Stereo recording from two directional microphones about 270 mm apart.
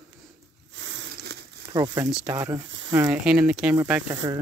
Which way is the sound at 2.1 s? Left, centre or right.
Centre.